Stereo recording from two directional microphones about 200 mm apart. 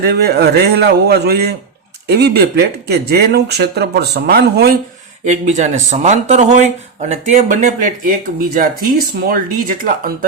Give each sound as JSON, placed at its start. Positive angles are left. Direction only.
{"t": 0.0, "sound": "speech", "side_deg": -55}
{"t": 5.2, "sound": "speech", "side_deg": -35}